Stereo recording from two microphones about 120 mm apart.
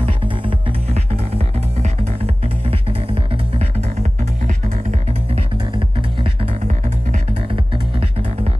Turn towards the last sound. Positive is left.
turn(degrees=-80)